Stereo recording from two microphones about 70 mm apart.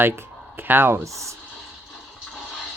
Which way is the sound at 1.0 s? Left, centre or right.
Right.